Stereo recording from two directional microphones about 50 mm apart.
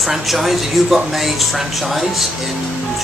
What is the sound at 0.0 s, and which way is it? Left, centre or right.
Speech, centre.